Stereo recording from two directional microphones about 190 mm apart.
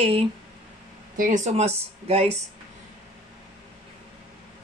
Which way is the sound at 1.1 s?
45° right (ahead or behind).